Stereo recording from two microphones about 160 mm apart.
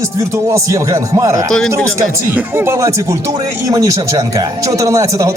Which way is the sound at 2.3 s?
15° right (ahead or behind).